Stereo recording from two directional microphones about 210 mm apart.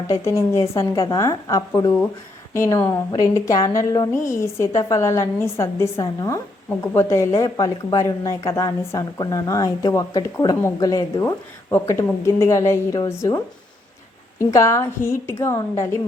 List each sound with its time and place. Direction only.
0.1 s a woman's voice: 15° left (ahead or behind)